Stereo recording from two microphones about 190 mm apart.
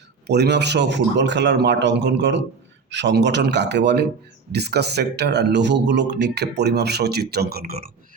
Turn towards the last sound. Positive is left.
turn(degrees=-50)  # may be behind; listen again after turning